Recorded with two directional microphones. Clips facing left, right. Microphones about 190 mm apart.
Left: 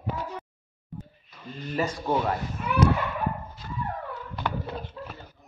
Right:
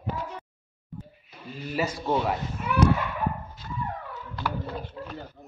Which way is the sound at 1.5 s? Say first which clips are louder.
Even; 10° right (ahead or behind).